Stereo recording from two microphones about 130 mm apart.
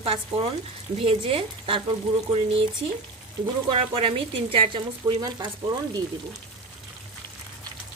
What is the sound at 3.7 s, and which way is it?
A woman's voice, 45° right (ahead or behind).